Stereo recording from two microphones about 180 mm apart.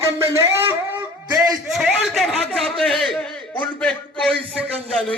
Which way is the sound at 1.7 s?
Centre (ahead or behind).